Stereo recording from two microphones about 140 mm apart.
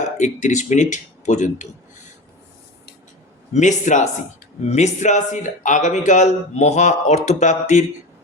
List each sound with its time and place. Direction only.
0.0 s a man's voice: 60° left (ahead or behind)
3.5 s a man's voice: 60° left (ahead or behind)